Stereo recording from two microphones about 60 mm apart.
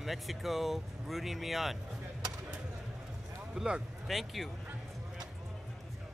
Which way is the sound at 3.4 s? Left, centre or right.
Centre.